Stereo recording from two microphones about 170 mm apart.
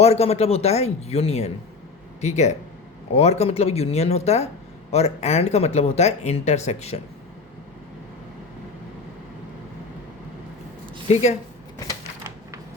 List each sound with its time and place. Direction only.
0.0 s speech: 40° left (ahead or behind)
11.1 s speech: 40° left (ahead or behind)